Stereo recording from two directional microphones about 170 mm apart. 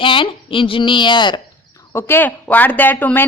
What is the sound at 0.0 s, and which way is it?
Speech, 30° left (ahead or behind).